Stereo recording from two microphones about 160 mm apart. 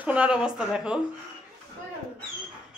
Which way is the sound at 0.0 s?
10° right (ahead or behind).